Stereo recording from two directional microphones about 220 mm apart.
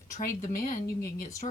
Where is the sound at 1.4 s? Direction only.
30° left (ahead or behind).